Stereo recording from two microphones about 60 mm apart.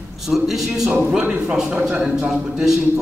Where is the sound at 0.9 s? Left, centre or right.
Right.